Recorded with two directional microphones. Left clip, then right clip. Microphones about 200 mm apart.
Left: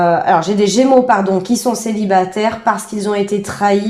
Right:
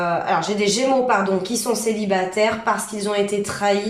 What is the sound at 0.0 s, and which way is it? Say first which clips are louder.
Speech: left 8 dB; 40° left (ahead or behind).